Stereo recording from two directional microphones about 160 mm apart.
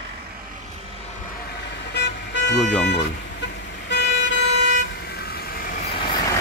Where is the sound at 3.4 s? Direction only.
90° left; by 6.1 s 75° left (ahead or behind).